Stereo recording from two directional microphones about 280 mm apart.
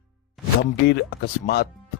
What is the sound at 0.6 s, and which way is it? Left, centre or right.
Speech, left.